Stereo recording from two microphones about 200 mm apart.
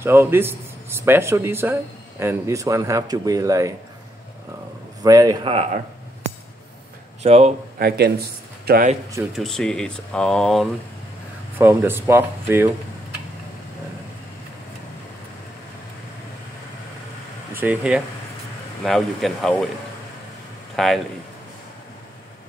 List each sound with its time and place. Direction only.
0.0 s speech: 10° right (ahead or behind)
5.0 s a man's voice: 20° right (ahead or behind)
7.2 s speech: 30° right (ahead or behind)
7.8 s speech: 50° right (ahead or behind)
9.3 s speech: centre (ahead or behind)
11.5 s speech: 10° right (ahead or behind)
17.6 s speech: 5° right (ahead or behind)
20.7 s speech: centre (ahead or behind)